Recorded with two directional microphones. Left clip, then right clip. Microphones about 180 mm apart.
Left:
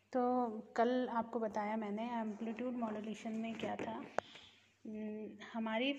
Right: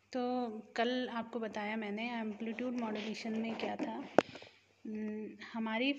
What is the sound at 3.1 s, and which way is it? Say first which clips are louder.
A woman's voice: right 5 dB; 25° right (ahead or behind).